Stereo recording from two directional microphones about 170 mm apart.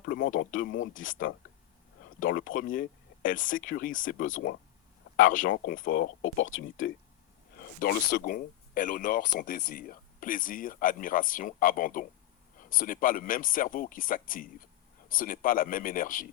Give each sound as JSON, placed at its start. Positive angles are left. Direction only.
{"t": 0.0, "sound": "a sound", "side_deg": 70}
{"t": 0.3, "sound": "speech", "side_deg": 55}
{"t": 7.8, "sound": "speech", "side_deg": 60}